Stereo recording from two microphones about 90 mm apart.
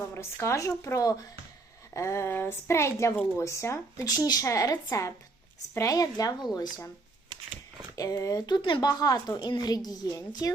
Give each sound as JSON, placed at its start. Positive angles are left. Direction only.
{"t": 0.1, "sound": "speech", "side_deg": 30}
{"t": 4.0, "sound": "speech", "side_deg": 45}
{"t": 7.9, "sound": "a woman's voice", "side_deg": 45}
{"t": 8.9, "sound": "a woman's voice", "side_deg": 45}